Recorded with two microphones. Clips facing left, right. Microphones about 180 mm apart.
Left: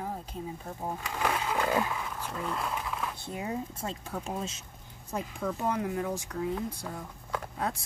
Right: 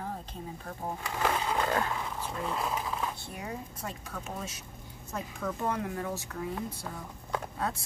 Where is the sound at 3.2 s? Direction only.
25° left (ahead or behind).